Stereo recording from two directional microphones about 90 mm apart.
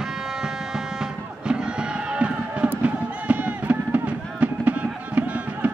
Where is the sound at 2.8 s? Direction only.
15° right (ahead or behind).